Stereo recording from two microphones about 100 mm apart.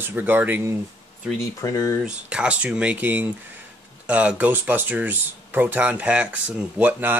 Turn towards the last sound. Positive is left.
turn(degrees=-20)  # may be behind; listen again after turning